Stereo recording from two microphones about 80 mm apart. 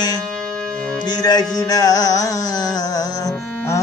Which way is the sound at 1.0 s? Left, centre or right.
Left.